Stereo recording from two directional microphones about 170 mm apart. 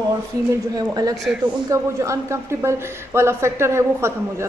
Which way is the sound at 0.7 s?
20° right (ahead or behind).